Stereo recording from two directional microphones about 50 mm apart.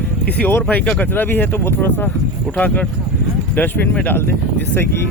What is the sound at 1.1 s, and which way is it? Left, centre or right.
Speech, left.